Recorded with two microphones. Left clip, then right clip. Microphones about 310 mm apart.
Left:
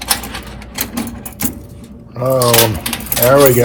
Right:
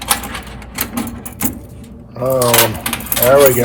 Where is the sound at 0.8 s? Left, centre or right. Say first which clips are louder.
Even; centre.